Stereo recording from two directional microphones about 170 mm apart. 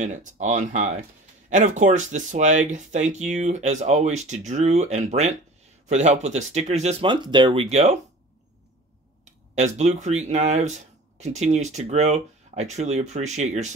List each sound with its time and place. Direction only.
0.0 s speech: 45° right (ahead or behind); by 7.6 s 25° right (ahead or behind)
7.7 s speech: 45° right (ahead or behind)
9.2 s speech: 45° right (ahead or behind)